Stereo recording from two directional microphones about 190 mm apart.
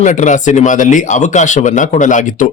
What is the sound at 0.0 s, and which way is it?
Speech, 40° left (ahead or behind).